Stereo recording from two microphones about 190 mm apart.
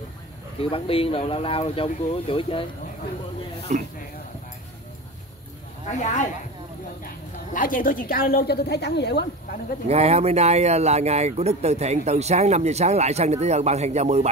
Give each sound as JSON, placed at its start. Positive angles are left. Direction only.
{"t": 0.6, "sound": "speech", "side_deg": 30}
{"t": 3.7, "sound": "speech", "side_deg": -40}
{"t": 5.9, "sound": "speech", "side_deg": 40}
{"t": 7.5, "sound": "a woman's voice", "side_deg": 45}
{"t": 9.8, "sound": "speech", "side_deg": -35}